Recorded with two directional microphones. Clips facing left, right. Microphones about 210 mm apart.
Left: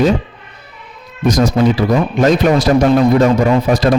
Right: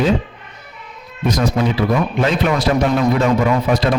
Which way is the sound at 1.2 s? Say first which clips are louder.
Left 5 dB; 90° left.